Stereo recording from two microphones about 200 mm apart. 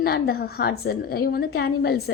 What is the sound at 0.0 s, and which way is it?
A woman's voice, 50° left (ahead or behind).